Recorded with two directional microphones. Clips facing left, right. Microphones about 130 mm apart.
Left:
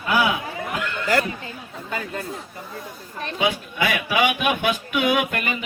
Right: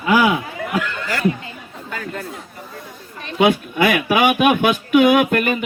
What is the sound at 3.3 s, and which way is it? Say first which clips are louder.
Speech: right 8 dB; 55° right (ahead or behind).